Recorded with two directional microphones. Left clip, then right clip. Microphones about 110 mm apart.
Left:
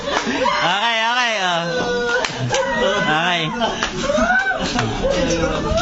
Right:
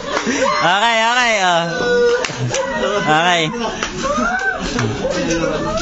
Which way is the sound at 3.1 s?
40° right (ahead or behind).